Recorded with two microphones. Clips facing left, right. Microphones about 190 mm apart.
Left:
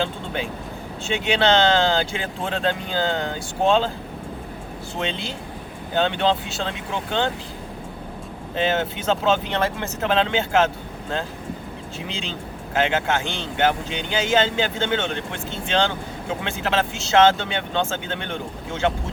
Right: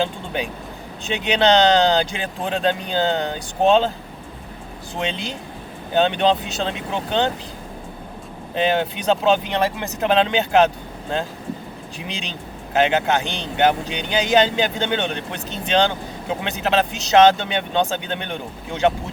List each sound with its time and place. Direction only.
0.0 s speech: 15° right (ahead or behind)
4.9 s speech: 15° right (ahead or behind)
8.5 s speech: 15° right (ahead or behind)
11.9 s speech: 15° right (ahead or behind)